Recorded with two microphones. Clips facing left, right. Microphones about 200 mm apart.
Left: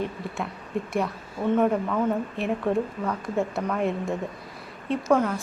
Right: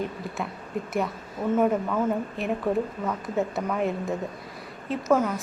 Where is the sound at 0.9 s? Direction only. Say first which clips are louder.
Even; 5° right (ahead or behind).